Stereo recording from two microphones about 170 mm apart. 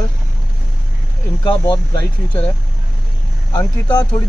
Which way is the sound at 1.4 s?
25° left (ahead or behind).